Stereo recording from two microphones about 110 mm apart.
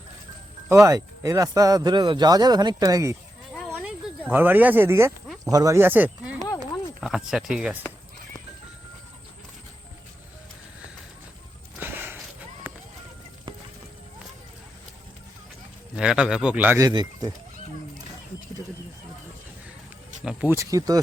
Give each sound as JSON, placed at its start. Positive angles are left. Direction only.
{"t": 0.7, "sound": "speech", "side_deg": -30}
{"t": 3.8, "sound": "speech", "side_deg": -15}
{"t": 7.0, "sound": "speech", "side_deg": -5}
{"t": 11.8, "sound": "walk", "side_deg": -20}
{"t": 12.7, "sound": "run", "side_deg": -20}
{"t": 16.0, "sound": "a man's voice", "side_deg": -10}
{"t": 16.9, "sound": "speech", "side_deg": -40}
{"t": 20.5, "sound": "speech", "side_deg": -30}